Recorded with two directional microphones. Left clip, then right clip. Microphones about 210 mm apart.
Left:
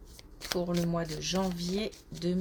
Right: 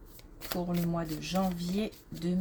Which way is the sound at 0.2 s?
20° left (ahead or behind).